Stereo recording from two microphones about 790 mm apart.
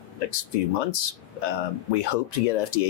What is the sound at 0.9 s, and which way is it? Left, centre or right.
Speech, left.